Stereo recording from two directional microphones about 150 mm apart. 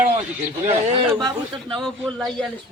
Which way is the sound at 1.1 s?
25° right (ahead or behind).